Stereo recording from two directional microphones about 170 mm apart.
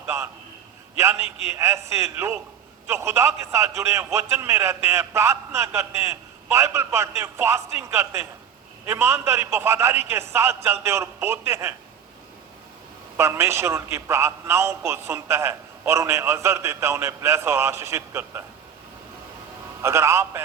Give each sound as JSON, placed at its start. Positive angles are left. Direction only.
{"t": 1.5, "sound": "a man's voice", "side_deg": -15}
{"t": 13.1, "sound": "a man's voice", "side_deg": -15}
{"t": 19.8, "sound": "a man's voice", "side_deg": -15}